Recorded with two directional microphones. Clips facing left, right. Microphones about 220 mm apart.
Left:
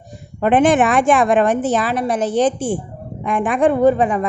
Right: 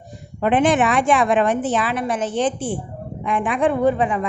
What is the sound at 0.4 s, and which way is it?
A woman's voice, 50° left (ahead or behind).